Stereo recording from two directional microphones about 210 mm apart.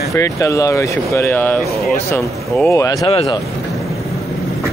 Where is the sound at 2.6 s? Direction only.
15° left (ahead or behind).